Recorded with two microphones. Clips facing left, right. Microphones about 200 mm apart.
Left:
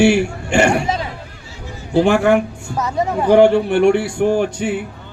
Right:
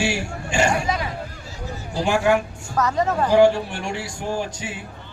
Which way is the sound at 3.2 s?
60° left (ahead or behind).